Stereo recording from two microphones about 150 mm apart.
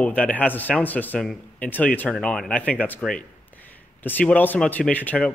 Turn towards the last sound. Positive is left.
turn(degrees=10)  # may be behind; listen again after turning